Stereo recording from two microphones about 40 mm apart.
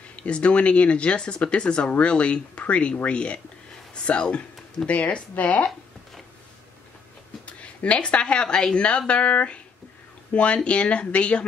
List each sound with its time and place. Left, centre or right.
0.1 s speech: left
7.4 s speech: left